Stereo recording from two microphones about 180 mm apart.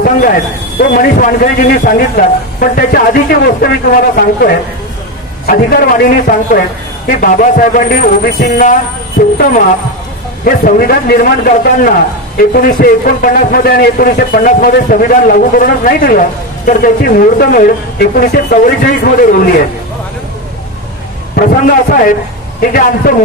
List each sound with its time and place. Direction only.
0.0 s a man's voice: 50° left (ahead or behind)
21.4 s a man's voice: 50° left (ahead or behind)